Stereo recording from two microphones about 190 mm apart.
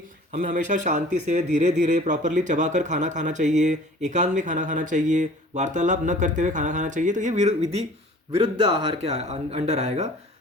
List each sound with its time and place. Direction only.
0.3 s speech: 45° right (ahead or behind)